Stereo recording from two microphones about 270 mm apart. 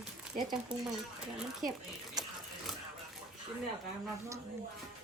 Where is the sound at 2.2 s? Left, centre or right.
Centre.